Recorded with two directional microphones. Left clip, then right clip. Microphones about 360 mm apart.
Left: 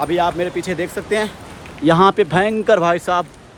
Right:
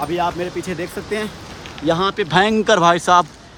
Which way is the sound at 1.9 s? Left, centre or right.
Centre.